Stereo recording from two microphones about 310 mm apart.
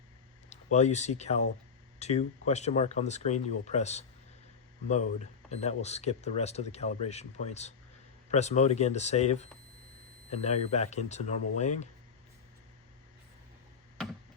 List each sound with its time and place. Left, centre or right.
0.5 s speech: left